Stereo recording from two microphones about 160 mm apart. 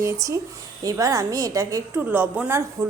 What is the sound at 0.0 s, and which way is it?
A woman's voice, 20° right (ahead or behind).